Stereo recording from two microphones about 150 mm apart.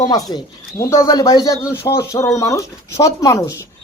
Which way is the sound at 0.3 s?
20° left (ahead or behind).